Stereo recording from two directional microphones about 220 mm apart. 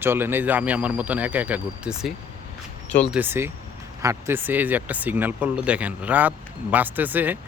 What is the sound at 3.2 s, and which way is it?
A man's voice, 10° right (ahead or behind).